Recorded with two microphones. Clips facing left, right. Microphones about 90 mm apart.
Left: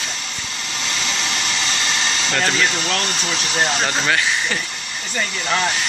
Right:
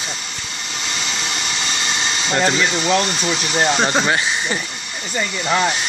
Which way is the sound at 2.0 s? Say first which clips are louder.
Right 4 dB; 15° right (ahead or behind).